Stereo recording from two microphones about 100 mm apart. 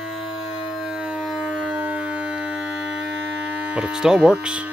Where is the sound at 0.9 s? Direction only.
5° right (ahead or behind).